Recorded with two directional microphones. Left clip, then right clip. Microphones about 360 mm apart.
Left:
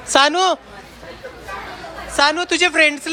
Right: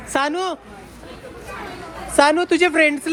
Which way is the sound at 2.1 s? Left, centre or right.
Centre.